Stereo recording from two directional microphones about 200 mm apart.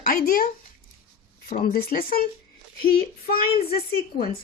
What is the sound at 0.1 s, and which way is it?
Speech, 45° left (ahead or behind).